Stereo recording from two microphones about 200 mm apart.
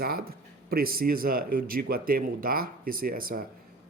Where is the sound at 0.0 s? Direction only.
50° right (ahead or behind).